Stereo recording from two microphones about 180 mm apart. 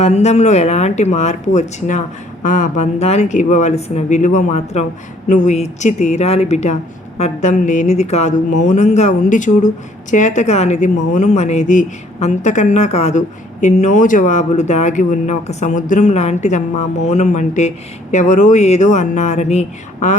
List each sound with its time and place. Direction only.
0.0 s a woman's voice: 40° left (ahead or behind)